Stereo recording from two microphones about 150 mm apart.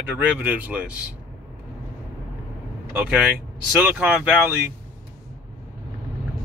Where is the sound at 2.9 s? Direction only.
10° right (ahead or behind).